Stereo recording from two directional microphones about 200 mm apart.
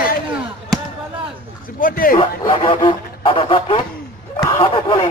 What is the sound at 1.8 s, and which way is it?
Speech, 45° left (ahead or behind).